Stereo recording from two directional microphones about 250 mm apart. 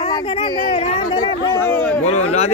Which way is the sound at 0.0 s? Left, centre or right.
Left.